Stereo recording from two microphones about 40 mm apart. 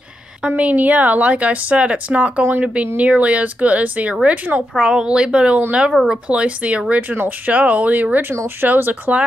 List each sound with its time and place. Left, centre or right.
0.5 s a woman's voice: right
4.9 s speech: right
6.9 s speech: right
8.7 s speech: right